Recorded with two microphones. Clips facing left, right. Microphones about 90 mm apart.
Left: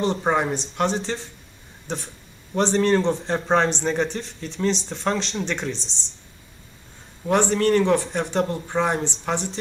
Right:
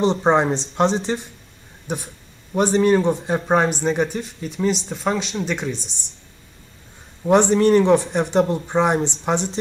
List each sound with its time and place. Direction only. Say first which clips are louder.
0.0 s speech: right 5 dB; 25° right (ahead or behind); by 5.9 s 5° right (ahead or behind)
7.2 s speech: right 5 dB; 20° right (ahead or behind)